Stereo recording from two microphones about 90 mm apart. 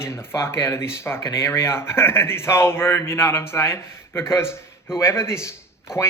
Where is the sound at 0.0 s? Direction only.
30° left (ahead or behind).